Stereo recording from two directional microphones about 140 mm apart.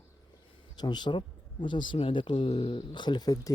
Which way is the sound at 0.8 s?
30° left (ahead or behind).